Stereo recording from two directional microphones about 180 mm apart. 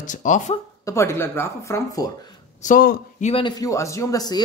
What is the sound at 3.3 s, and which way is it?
Speech, 30° left (ahead or behind).